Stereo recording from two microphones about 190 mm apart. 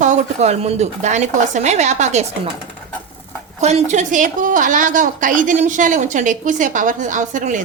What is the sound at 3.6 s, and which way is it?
A woman's voice, 35° right (ahead or behind).